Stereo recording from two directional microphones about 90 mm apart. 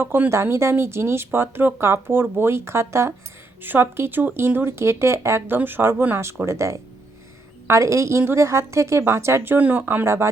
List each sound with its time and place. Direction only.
0.0 s a woman's voice: 25° right (ahead or behind)